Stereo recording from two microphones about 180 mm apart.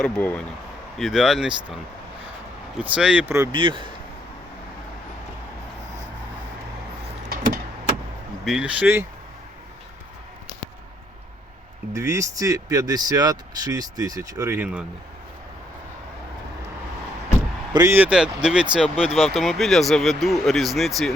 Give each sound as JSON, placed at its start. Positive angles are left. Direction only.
{"t": 0.0, "sound": "speech", "side_deg": 5}
{"t": 3.5, "sound": "speech", "side_deg": -25}
{"t": 8.4, "sound": "speech", "side_deg": -5}
{"t": 11.9, "sound": "speech", "side_deg": -15}
{"t": 17.7, "sound": "speech", "side_deg": -15}